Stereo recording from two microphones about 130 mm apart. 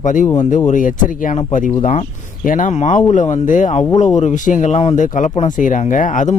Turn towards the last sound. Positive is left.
turn(degrees=85)